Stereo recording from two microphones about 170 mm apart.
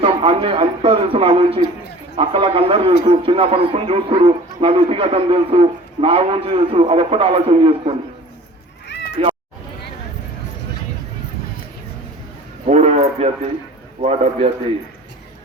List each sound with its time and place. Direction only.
0.0 s a man's voice: 35° right (ahead or behind)
12.6 s a sound: 40° right (ahead or behind)
14.0 s a man's voice: 35° right (ahead or behind)